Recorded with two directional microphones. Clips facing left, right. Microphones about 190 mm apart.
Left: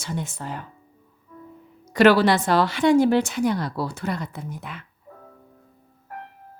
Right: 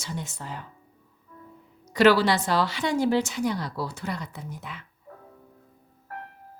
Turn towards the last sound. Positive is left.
turn(degrees=55)  # may be behind; listen again after turning